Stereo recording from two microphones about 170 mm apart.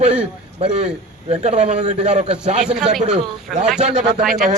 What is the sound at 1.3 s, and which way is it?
A man's voice, 40° right (ahead or behind).